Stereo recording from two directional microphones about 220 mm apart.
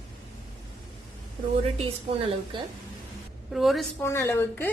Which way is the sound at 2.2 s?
25° right (ahead or behind).